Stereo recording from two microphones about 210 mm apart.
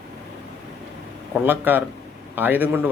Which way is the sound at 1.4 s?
10° right (ahead or behind).